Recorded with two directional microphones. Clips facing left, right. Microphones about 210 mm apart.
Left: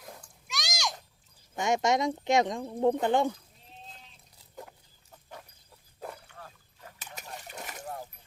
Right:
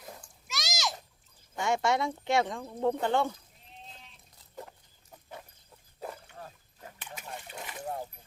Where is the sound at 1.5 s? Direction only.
20° left (ahead or behind).